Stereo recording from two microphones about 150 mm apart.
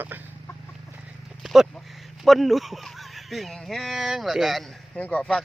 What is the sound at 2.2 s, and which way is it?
Speech, centre (ahead or behind).